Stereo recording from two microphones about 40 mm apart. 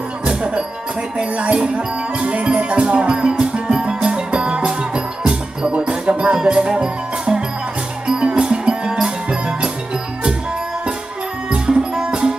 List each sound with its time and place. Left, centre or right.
0.3 s music: centre
11.5 s music: centre